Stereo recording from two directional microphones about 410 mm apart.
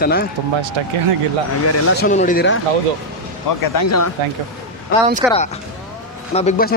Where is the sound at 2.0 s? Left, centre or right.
Centre.